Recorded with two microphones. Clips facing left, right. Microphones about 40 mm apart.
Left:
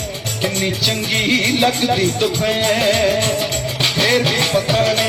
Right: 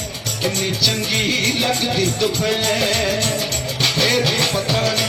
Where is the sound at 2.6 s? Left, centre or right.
Left.